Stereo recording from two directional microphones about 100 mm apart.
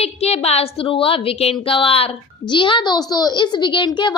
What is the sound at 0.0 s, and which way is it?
A woman's voice, 90° left.